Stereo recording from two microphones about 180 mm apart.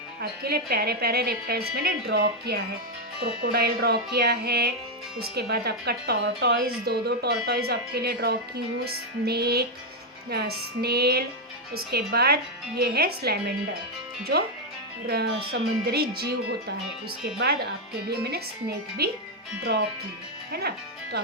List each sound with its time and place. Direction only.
0.2 s a woman's voice: 60° right (ahead or behind)
15.0 s a woman's voice: 65° right (ahead or behind)